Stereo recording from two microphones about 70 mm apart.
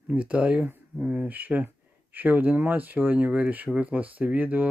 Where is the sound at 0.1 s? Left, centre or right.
Centre.